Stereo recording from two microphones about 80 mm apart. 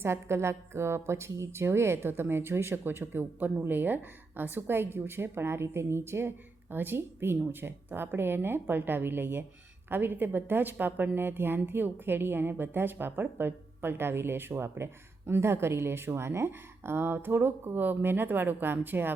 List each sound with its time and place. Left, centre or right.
0.0 s a woman's voice: right